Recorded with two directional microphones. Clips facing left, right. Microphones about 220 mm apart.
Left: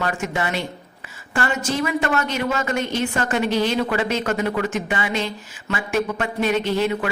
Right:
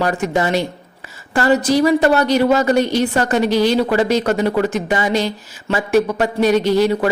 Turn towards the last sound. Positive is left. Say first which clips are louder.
# right 6 dB
turn(degrees=-35)  # may be behind; listen again after turning